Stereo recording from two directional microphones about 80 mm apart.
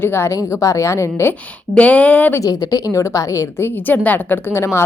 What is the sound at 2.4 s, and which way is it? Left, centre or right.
A woman's voice, left.